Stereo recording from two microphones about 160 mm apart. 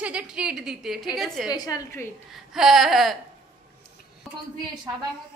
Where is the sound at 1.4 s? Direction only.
25° left (ahead or behind).